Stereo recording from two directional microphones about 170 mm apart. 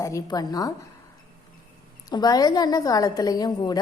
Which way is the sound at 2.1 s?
25° left (ahead or behind).